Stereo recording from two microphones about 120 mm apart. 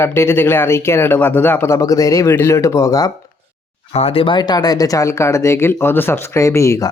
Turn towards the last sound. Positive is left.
turn(degrees=25)  # may be behind; listen again after turning